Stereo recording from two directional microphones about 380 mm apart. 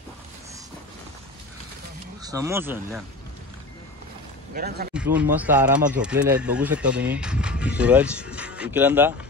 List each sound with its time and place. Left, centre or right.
2.2 s speech: centre
4.6 s speech: right
4.9 s a sound: centre
5.3 s speech: centre